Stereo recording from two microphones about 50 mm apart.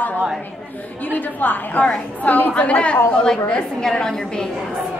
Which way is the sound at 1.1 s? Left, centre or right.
Left.